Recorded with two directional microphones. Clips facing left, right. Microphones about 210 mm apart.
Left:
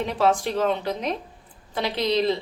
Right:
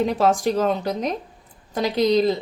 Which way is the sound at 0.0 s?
45° right (ahead or behind).